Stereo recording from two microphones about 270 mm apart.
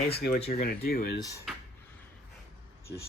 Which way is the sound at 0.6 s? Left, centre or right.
Left.